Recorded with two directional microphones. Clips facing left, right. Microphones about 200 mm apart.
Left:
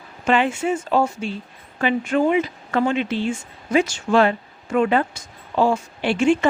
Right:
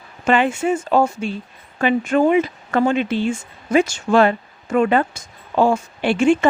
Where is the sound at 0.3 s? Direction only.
50° right (ahead or behind).